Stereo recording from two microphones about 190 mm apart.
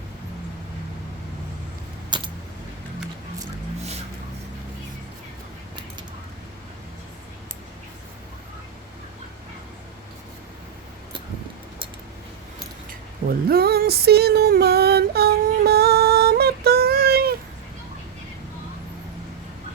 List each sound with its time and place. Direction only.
2.0 s keys jangling: 25° right (ahead or behind)
13.5 s female singing: 55° right (ahead or behind)